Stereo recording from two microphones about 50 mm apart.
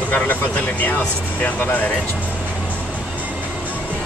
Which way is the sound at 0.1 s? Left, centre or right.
Left.